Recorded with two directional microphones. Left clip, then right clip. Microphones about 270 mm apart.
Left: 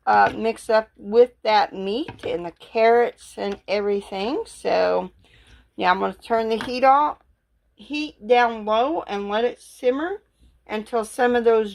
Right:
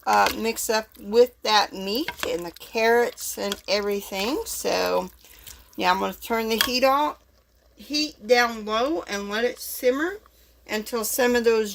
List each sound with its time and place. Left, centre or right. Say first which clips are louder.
0.0 s speech: left 3 dB; centre
7.9 s speech: left 1 dB; centre